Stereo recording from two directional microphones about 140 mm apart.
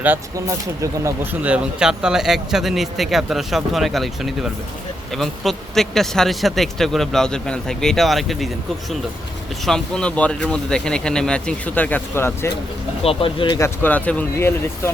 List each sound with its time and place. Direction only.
0.3 s speech: 20° right (ahead or behind); by 8.4 s centre (ahead or behind)
9.6 s speech: 5° left (ahead or behind)
13.0 s speech: 40° left (ahead or behind)
13.6 s speech: 10° left (ahead or behind)